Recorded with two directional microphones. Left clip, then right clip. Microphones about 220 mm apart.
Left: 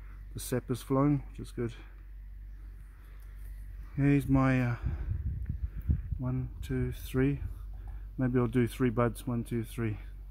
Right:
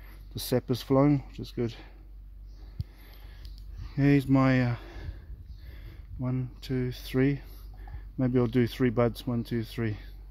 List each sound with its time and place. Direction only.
0.4 s speech: 25° right (ahead or behind)
3.9 s speech: 25° right (ahead or behind)
6.1 s speech: 25° right (ahead or behind)